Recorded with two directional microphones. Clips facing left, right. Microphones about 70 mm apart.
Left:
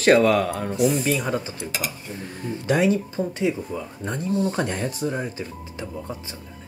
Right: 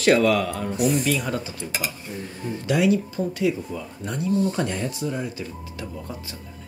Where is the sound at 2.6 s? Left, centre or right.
Left.